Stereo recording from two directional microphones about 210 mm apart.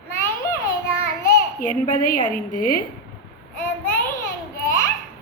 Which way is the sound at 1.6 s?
40° left (ahead or behind).